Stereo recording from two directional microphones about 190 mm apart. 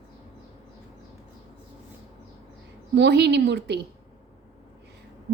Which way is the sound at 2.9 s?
60° right (ahead or behind).